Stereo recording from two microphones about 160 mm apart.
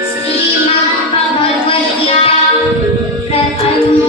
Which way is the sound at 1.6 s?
35° left (ahead or behind).